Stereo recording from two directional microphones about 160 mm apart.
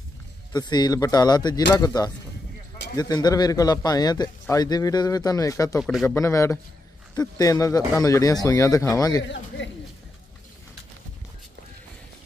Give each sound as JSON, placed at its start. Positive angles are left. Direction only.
{"t": 0.5, "sound": "a man's voice", "side_deg": 25}
{"t": 3.0, "sound": "a man's voice", "side_deg": 25}
{"t": 5.8, "sound": "speech", "side_deg": 0}
{"t": 6.0, "sound": "a man's voice", "side_deg": 20}